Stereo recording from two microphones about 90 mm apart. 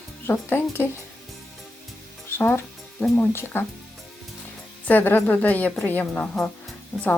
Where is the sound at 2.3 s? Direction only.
25° left (ahead or behind).